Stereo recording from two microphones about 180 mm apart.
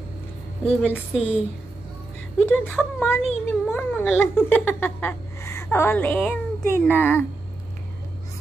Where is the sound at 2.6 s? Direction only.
10° left (ahead or behind).